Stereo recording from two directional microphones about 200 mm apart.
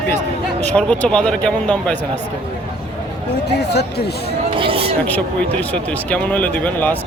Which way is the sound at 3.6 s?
55° left (ahead or behind).